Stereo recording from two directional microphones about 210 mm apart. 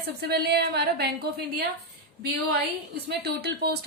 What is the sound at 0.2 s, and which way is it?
A woman's voice, 50° right (ahead or behind).